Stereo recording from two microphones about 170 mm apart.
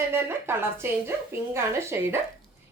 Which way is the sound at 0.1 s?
15° right (ahead or behind).